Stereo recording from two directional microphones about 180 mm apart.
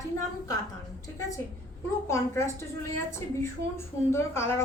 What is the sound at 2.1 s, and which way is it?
Speech, 15° left (ahead or behind).